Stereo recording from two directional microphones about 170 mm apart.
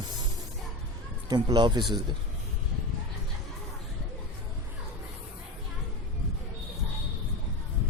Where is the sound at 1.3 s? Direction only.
25° right (ahead or behind).